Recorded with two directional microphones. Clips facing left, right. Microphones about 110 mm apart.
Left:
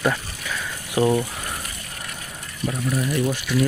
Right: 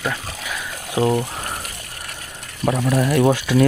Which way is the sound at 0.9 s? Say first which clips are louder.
Right 1 dB; 20° right (ahead or behind).